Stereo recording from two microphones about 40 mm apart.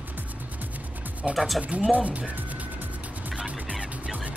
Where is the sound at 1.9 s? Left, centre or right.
Right.